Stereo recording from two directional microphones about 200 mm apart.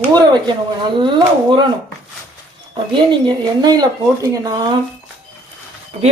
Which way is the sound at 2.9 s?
25° right (ahead or behind).